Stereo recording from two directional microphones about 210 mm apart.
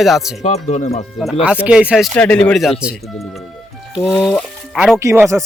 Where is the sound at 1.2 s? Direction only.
Centre (ahead or behind).